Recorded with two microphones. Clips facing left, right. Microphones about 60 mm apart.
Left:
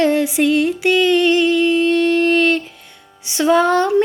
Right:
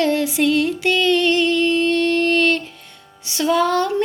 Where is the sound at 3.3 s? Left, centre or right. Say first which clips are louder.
Left 4 dB; left.